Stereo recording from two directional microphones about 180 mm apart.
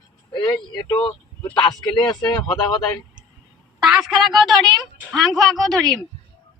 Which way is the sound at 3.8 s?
5° right (ahead or behind).